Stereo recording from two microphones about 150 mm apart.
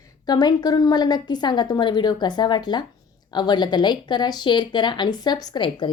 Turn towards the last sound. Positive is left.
turn(degrees=30)  # may be behind; listen again after turning